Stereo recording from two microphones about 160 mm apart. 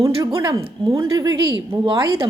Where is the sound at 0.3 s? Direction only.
20° right (ahead or behind).